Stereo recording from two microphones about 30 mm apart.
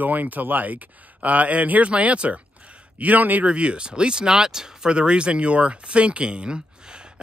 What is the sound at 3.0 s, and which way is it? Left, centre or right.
Speech, right.